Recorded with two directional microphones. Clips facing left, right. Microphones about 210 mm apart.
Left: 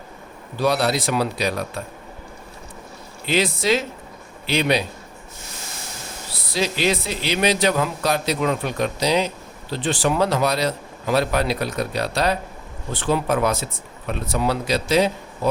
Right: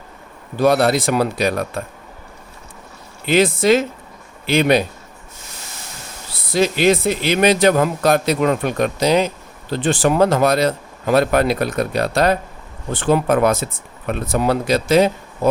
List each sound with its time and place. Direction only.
0.6 s speech: 50° right (ahead or behind)
3.2 s speech: 50° right (ahead or behind)
6.5 s speech: 55° right (ahead or behind)